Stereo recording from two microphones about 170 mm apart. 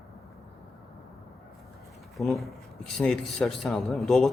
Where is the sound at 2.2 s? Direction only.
Centre (ahead or behind).